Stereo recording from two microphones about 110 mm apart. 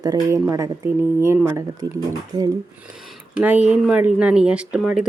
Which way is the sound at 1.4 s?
30° right (ahead or behind).